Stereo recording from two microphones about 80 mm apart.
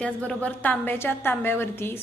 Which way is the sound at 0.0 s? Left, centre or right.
Centre.